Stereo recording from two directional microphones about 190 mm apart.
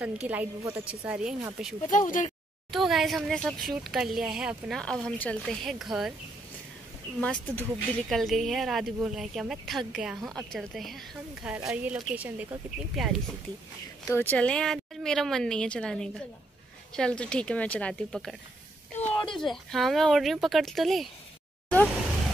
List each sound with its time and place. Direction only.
0.0 s speech: 10° right (ahead or behind)
1.9 s speech: 45° left (ahead or behind)
2.7 s speech: centre (ahead or behind)
7.2 s speech: 5° left (ahead or behind)
14.0 s speech: 10° left (ahead or behind)
18.9 s a sound: 25° left (ahead or behind)
19.3 s speech: centre (ahead or behind)